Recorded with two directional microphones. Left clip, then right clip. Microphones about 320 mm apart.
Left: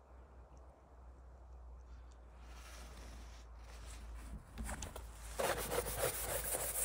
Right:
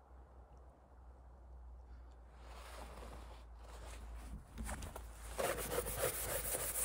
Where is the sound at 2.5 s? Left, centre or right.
Centre.